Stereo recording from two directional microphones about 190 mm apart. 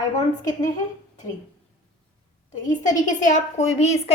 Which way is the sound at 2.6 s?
40° left (ahead or behind).